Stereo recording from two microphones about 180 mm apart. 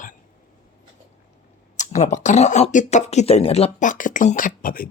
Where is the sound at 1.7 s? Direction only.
40° left (ahead or behind).